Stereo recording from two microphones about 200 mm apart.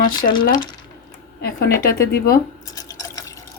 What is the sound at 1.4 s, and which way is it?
A woman's voice, 50° left (ahead or behind).